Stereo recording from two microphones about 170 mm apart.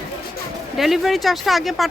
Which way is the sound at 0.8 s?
Centre (ahead or behind).